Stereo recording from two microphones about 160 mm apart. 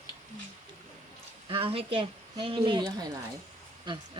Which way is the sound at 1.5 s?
35° right (ahead or behind).